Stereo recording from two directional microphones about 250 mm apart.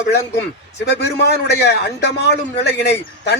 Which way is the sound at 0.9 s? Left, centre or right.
Left.